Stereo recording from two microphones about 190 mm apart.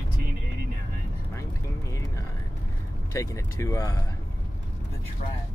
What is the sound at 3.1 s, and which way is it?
Speech, 15° left (ahead or behind).